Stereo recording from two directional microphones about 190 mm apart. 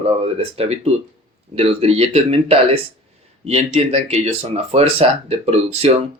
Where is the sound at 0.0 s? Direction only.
30° right (ahead or behind).